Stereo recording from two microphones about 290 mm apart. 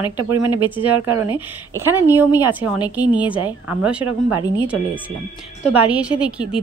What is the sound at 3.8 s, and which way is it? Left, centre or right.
Speech, centre.